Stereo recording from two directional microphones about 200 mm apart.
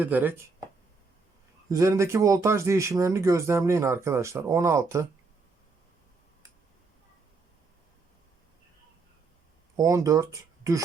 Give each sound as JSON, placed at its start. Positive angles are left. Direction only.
{"t": 0.0, "sound": "speech", "side_deg": -10}
{"t": 1.7, "sound": "speech", "side_deg": -15}
{"t": 9.7, "sound": "speech", "side_deg": -15}